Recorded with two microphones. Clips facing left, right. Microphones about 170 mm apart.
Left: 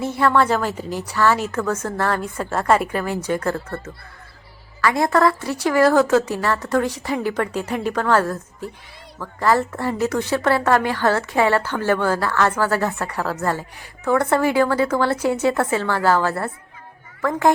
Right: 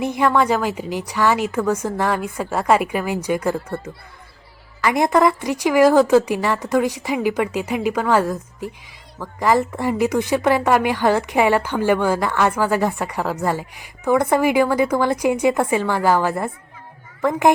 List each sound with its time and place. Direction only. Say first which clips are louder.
0.0 s a child's voice: even; 15° right (ahead or behind)